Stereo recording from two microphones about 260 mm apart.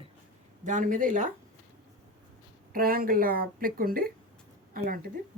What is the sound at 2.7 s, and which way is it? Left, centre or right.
Speech, right.